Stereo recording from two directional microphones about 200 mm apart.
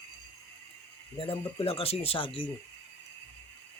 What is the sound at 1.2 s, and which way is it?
Speech, 30° left (ahead or behind).